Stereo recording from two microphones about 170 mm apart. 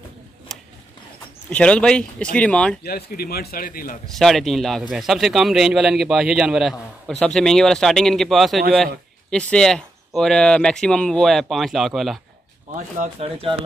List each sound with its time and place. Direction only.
0.5 s a sound: centre (ahead or behind)
1.5 s speech: 5° left (ahead or behind)
2.8 s speech: 65° left (ahead or behind)
4.2 s speech: centre (ahead or behind)
13.2 s speech: 35° right (ahead or behind)